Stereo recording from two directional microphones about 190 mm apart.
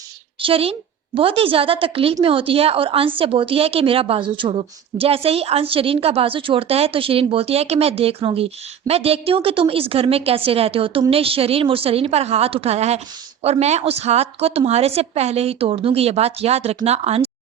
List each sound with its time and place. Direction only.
0.4 s a woman's voice: 30° right (ahead or behind)